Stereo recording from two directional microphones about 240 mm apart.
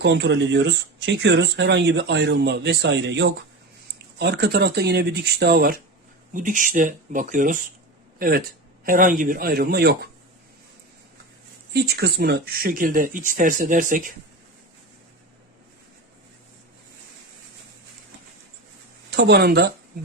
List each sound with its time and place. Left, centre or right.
0.0 s speech: right
11.7 s speech: right
19.1 s speech: right